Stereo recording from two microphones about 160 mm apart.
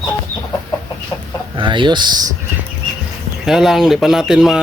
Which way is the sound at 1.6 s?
30° right (ahead or behind).